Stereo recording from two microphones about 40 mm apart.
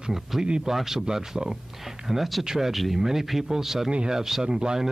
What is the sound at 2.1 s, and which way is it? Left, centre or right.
Speech, centre.